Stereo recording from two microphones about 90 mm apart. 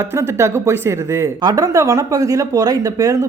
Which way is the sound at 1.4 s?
45° right (ahead or behind).